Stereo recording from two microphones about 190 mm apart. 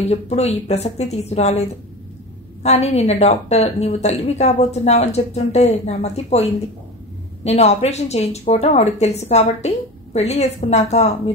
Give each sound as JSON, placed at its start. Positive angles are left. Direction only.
{"t": 0.1, "sound": "speech", "side_deg": 35}
{"t": 7.4, "sound": "speech", "side_deg": 35}